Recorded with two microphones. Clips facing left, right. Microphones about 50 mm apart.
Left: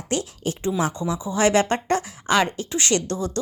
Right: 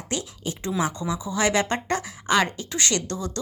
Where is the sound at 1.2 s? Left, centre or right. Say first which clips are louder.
Left 4 dB; left.